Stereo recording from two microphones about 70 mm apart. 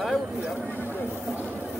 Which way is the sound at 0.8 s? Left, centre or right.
Left.